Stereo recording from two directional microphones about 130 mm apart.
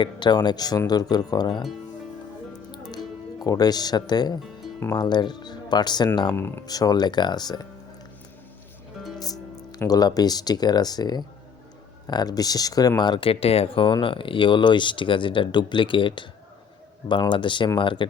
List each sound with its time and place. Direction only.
0.0 s speech: 35° left (ahead or behind)
2.9 s speech: 30° left (ahead or behind)
6.3 s speech: 20° left (ahead or behind)
6.7 s speech: 30° left (ahead or behind)
9.1 s speech: 30° left (ahead or behind)